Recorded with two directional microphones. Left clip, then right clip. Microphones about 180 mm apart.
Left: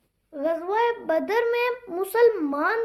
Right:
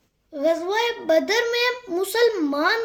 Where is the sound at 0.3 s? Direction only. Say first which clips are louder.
Right 3 dB; 40° right (ahead or behind).